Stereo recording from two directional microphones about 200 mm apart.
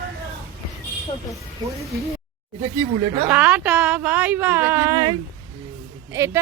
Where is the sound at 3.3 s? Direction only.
5° right (ahead or behind).